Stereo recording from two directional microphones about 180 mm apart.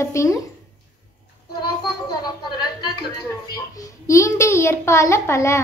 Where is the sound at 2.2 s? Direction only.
25° left (ahead or behind).